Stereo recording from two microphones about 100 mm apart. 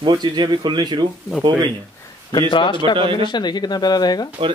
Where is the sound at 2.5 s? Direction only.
55° left (ahead or behind).